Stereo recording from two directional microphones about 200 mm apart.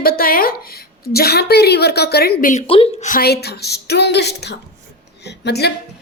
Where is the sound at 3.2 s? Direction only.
55° left (ahead or behind).